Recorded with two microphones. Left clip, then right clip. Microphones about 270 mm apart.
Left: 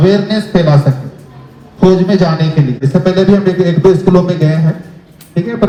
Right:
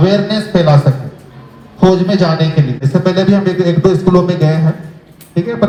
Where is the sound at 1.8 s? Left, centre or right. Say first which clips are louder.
Left 1 dB; centre.